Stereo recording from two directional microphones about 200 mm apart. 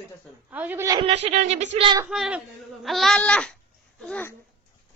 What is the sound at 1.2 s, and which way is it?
Speech, 35° right (ahead or behind).